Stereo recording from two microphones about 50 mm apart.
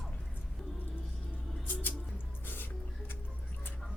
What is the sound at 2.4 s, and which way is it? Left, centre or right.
Music, left.